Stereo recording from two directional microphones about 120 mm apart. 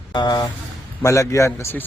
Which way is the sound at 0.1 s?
35° left (ahead or behind).